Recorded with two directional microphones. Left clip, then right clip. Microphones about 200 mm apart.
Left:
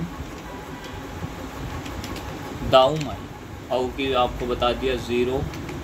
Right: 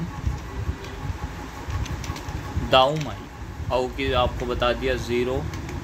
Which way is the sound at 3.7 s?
45° right (ahead or behind).